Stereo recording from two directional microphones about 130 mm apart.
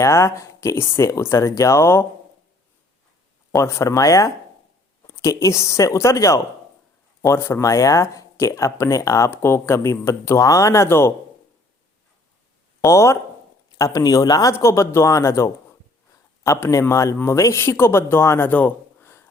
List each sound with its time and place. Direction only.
0.0 s speech: 20° left (ahead or behind)
3.5 s speech: 20° left (ahead or behind)
12.8 s speech: 20° left (ahead or behind)